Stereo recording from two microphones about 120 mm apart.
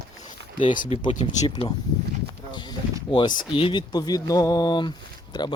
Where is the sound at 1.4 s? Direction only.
50° left (ahead or behind).